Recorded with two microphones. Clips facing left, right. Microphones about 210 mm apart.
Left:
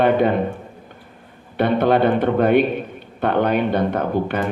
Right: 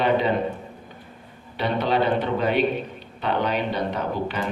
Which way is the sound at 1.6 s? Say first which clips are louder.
Left 6 dB; 55° left (ahead or behind).